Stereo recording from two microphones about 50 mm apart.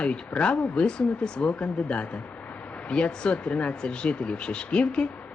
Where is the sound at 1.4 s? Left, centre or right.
Left.